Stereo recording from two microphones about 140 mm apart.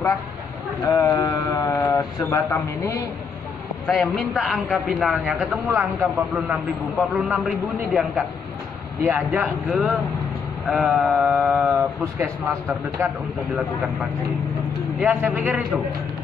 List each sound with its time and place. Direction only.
1.1 s speech: 25° left (ahead or behind)
3.8 s a man's voice: centre (ahead or behind)
15.0 s speech: 10° right (ahead or behind)